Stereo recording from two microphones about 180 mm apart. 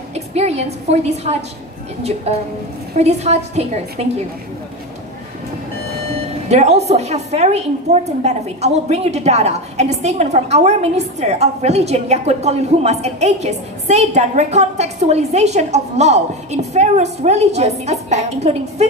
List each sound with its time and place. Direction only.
0.1 s a woman's voice: 35° right (ahead or behind)
6.5 s a woman's voice: 40° right (ahead or behind)